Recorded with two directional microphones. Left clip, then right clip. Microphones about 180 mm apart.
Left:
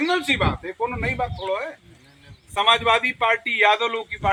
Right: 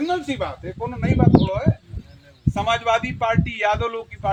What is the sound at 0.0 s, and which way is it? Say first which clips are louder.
Speech: left 3 dB; 60° right (ahead or behind).